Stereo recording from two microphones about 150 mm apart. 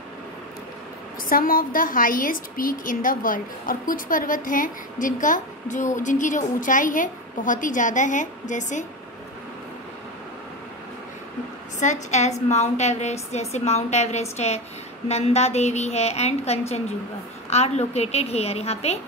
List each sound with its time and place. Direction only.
1.3 s a woman's voice: 70° left (ahead or behind); by 8.8 s 55° left (ahead or behind)
11.8 s a woman's voice: 50° left (ahead or behind)